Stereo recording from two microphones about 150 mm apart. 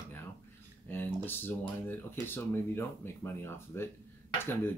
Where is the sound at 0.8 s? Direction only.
15° left (ahead or behind).